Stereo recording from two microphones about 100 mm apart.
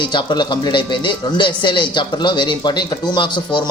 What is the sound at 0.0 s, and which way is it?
Speech, 50° left (ahead or behind).